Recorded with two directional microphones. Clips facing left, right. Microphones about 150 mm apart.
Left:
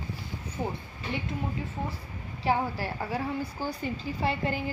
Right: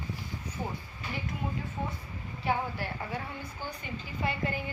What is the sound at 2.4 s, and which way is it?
A woman's voice, 35° left (ahead or behind).